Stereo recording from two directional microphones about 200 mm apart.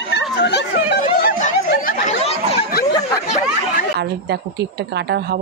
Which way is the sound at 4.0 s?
55° right (ahead or behind).